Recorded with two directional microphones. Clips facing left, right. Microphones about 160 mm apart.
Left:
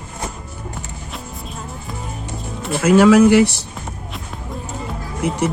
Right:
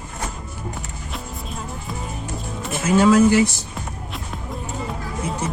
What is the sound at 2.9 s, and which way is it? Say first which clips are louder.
Speech: left 4 dB; 75° left (ahead or behind).